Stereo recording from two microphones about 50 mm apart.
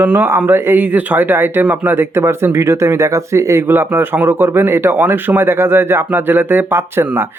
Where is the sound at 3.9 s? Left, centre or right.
Right.